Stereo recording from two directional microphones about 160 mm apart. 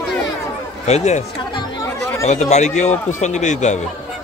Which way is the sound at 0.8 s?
45° left (ahead or behind).